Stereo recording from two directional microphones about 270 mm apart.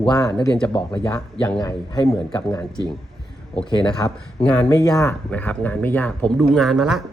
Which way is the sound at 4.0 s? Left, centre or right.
Centre.